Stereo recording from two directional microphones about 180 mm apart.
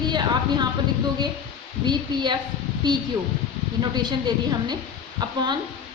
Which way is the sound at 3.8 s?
25° right (ahead or behind).